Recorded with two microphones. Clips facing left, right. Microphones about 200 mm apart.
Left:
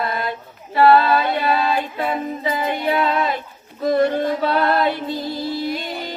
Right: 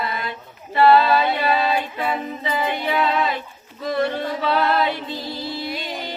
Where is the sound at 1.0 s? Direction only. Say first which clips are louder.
Even; 50° left (ahead or behind).